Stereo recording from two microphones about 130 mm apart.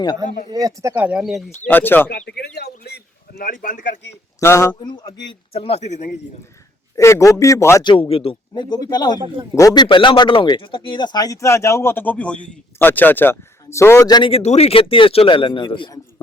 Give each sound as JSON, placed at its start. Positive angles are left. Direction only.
{"t": 0.5, "sound": "speech", "side_deg": -25}
{"t": 0.9, "sound": "speech", "side_deg": -10}
{"t": 1.6, "sound": "speech", "side_deg": 15}
{"t": 3.4, "sound": "speech", "side_deg": 90}
{"t": 4.4, "sound": "speech", "side_deg": 20}
{"t": 4.9, "sound": "speech", "side_deg": 35}
{"t": 6.9, "sound": "speech", "side_deg": 25}
{"t": 7.9, "sound": "speech", "side_deg": 40}
{"t": 14.1, "sound": "speech", "side_deg": 40}